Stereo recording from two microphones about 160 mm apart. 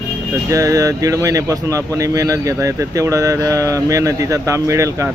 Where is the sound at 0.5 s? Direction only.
20° right (ahead or behind).